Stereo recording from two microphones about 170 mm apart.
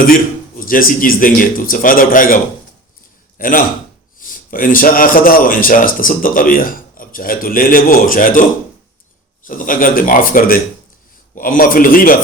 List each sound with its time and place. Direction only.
0.0 s speech: 55° left (ahead or behind)